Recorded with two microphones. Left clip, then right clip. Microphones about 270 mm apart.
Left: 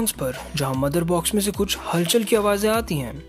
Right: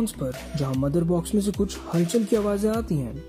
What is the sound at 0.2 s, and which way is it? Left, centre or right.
Speech, left.